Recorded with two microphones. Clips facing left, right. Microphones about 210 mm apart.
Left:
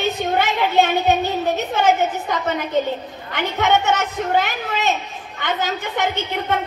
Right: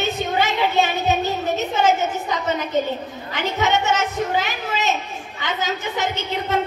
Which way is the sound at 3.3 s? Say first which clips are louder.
Left 2 dB; 55° left (ahead or behind).